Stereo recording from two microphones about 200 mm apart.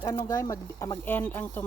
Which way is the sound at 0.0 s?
15° left (ahead or behind).